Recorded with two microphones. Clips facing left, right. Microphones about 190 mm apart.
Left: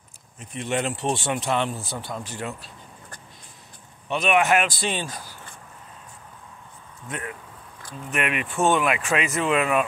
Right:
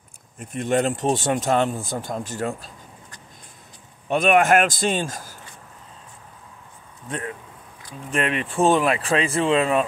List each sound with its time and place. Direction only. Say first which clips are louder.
0.4 s speech: right 5 dB; 50° right (ahead or behind)
4.1 s speech: right 4 dB; 50° right (ahead or behind)
7.1 s speech: right 3 dB; 30° right (ahead or behind)